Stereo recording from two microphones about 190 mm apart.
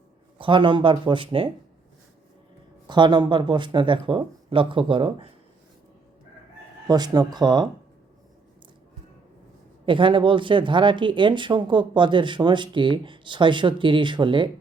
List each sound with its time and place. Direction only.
0.3 s speech: 25° right (ahead or behind)
2.8 s speech: 20° right (ahead or behind)
6.8 s speech: 20° right (ahead or behind)
9.8 s speech: 25° right (ahead or behind)